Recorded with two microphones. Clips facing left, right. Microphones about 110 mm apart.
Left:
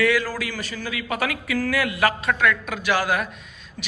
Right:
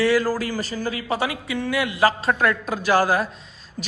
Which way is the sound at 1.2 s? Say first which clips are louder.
Left 1 dB; 25° right (ahead or behind).